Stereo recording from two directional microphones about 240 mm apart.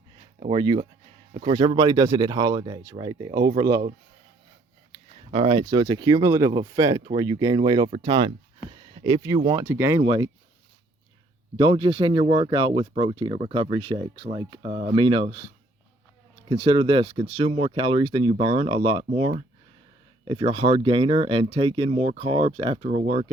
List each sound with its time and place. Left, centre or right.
0.3 s speech: right
5.3 s speech: right
11.5 s speech: right